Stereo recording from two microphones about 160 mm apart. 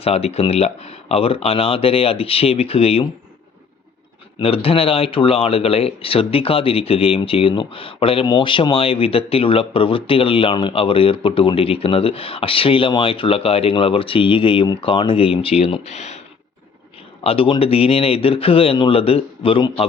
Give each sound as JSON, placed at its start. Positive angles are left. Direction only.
{"t": 0.0, "sound": "a man's voice", "side_deg": 40}
{"t": 4.4, "sound": "a man's voice", "side_deg": 35}
{"t": 17.2, "sound": "a man's voice", "side_deg": 35}